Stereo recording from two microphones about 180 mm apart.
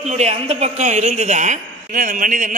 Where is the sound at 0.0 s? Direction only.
40° right (ahead or behind).